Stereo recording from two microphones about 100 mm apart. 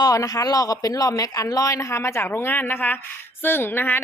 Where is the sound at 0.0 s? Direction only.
35° left (ahead or behind).